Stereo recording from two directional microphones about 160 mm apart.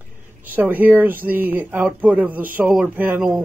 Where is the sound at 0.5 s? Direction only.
10° right (ahead or behind).